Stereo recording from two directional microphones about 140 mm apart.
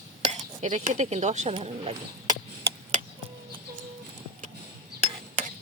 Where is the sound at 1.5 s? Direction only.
45° right (ahead or behind).